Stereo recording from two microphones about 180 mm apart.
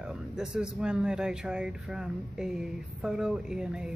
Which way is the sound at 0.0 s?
5° right (ahead or behind).